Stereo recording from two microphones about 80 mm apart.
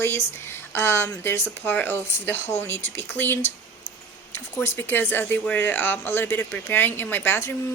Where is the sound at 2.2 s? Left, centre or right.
Left.